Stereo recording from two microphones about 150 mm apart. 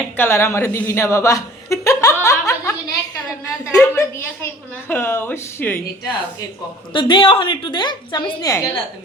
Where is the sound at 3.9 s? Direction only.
15° left (ahead or behind).